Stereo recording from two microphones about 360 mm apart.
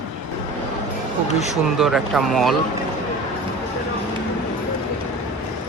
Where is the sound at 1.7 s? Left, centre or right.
Centre.